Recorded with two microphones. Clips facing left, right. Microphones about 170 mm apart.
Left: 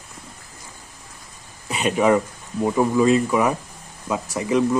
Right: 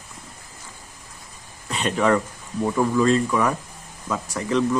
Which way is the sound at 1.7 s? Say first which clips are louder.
Left 2 dB; 10° left (ahead or behind).